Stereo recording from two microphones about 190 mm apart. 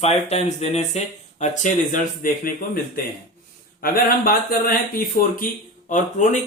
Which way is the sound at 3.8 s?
50° left (ahead or behind).